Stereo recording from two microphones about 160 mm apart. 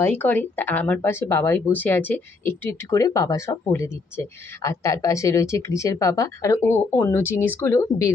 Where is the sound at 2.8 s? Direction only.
20° left (ahead or behind).